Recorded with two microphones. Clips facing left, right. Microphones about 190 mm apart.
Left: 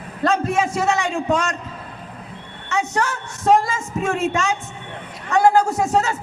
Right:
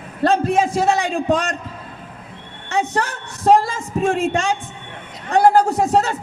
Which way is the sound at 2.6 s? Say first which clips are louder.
Right 1 dB; 35° right (ahead or behind).